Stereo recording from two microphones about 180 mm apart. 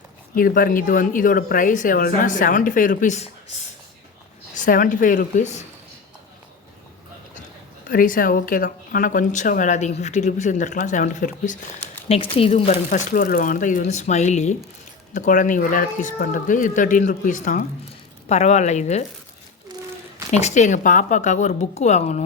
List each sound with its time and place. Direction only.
0.3 s a woman's voice: 50° left (ahead or behind)
4.5 s a woman's voice: 50° left (ahead or behind)
7.9 s a woman's voice: 50° left (ahead or behind)
12.0 s a woman's voice: 35° left (ahead or behind)
12.9 s a woman's voice: 50° left (ahead or behind)
20.3 s a woman's voice: 40° left (ahead or behind)